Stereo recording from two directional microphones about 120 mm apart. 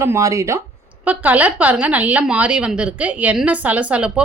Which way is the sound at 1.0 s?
15° right (ahead or behind).